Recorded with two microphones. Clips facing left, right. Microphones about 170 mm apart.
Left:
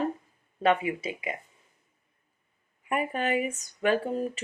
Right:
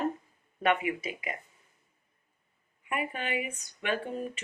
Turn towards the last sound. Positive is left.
turn(degrees=35)  # may be behind; listen again after turning